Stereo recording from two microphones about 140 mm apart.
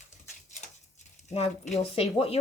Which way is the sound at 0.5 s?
55° left (ahead or behind).